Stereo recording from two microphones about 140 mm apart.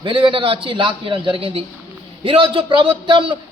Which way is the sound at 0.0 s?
40° right (ahead or behind).